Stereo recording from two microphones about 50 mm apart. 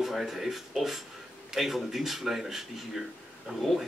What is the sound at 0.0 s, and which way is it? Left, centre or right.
Speech, centre.